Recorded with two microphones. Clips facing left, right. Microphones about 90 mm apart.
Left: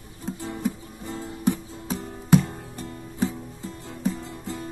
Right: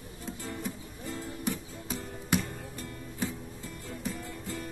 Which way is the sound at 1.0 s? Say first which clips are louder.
Left 8 dB; 25° left (ahead or behind).